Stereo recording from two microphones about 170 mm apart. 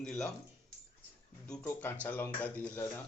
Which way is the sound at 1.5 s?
10° left (ahead or behind).